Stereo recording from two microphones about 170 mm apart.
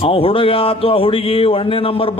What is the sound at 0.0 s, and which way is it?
Speech, 35° left (ahead or behind).